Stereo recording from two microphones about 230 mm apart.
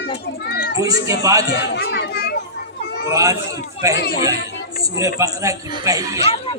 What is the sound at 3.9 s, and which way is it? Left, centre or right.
Speech, left.